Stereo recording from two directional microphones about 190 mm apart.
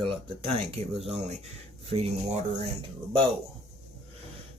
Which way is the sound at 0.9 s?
Centre (ahead or behind).